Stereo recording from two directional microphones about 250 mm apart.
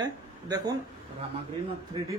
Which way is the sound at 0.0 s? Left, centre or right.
Centre.